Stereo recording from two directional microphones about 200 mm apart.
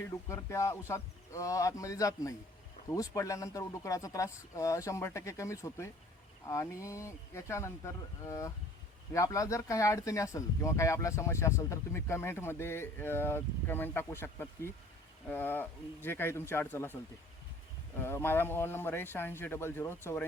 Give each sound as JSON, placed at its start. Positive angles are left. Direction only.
{"t": 0.3, "sound": "speech", "side_deg": 15}